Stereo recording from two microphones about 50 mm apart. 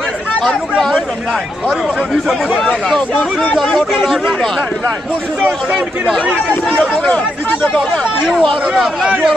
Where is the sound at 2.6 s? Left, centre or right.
Centre.